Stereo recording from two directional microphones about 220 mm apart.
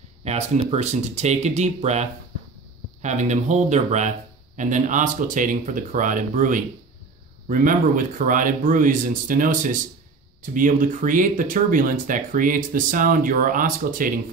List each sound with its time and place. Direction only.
0.2 s speech: 30° right (ahead or behind)